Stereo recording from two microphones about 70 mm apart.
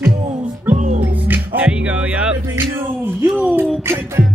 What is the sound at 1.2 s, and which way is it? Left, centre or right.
Music, right.